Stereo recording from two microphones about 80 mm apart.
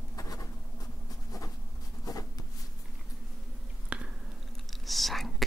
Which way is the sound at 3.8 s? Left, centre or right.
Centre.